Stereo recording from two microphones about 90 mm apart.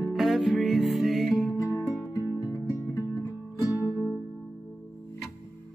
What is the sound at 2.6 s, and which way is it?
Music, 40° left (ahead or behind).